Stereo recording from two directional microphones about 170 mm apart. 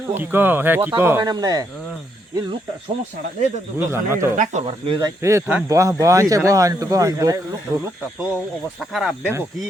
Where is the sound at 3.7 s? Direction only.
15° right (ahead or behind).